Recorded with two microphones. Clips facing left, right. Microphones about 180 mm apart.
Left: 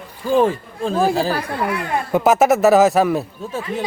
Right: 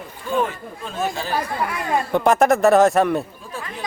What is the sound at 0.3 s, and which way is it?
Speech, 30° left (ahead or behind).